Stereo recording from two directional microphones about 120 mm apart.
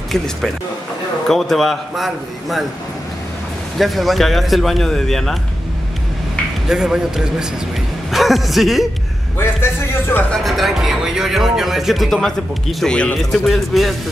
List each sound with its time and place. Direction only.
1.3 s speech: centre (ahead or behind)
3.7 s speech: centre (ahead or behind)
6.7 s speech: 5° right (ahead or behind)
9.4 s speech: 20° left (ahead or behind)
10.3 s speech: centre (ahead or behind)